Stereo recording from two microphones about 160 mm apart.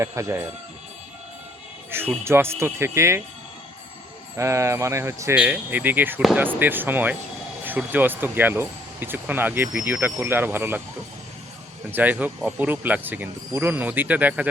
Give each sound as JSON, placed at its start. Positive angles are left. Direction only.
{"t": 0.0, "sound": "speech", "side_deg": -15}
{"t": 1.9, "sound": "speech", "side_deg": -15}
{"t": 4.4, "sound": "speech", "side_deg": -15}
{"t": 11.9, "sound": "speech", "side_deg": -10}